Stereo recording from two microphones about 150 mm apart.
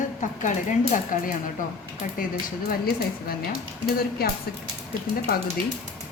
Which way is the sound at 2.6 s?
85° left.